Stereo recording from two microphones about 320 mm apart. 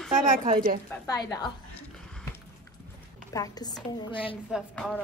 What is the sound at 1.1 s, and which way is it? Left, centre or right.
Speech, centre.